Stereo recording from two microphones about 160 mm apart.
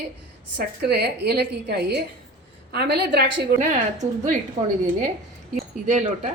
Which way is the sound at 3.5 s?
50° right (ahead or behind).